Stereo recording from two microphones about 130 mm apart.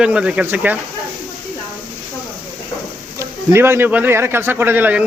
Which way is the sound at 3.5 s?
20° right (ahead or behind).